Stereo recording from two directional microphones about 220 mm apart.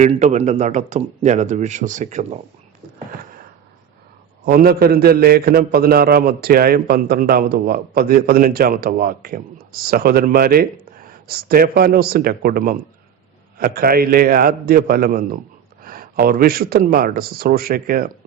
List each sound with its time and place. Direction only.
0.0 s speech: 35° right (ahead or behind)
4.4 s a man's voice: 45° right (ahead or behind)